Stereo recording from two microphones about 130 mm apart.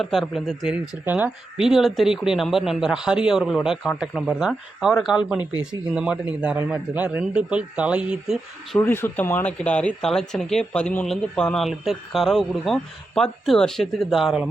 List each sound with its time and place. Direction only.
0.0 s speech: centre (ahead or behind)
1.0 s a man's voice: 15° right (ahead or behind)
8.8 s speech: 15° left (ahead or behind); by 14.5 s centre (ahead or behind)